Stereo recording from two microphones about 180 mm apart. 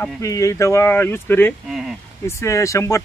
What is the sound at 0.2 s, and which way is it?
Speech, 15° left (ahead or behind).